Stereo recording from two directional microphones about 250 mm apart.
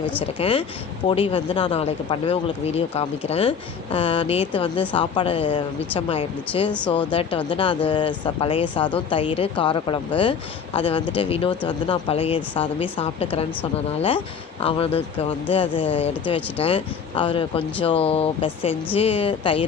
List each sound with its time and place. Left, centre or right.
0.0 s speech: centre
0.3 s speech: left
6.7 s speech: centre
7.1 s speech: left
14.6 s speech: left